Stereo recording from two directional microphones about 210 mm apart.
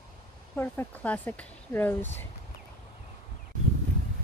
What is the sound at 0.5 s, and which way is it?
Speech, 10° left (ahead or behind).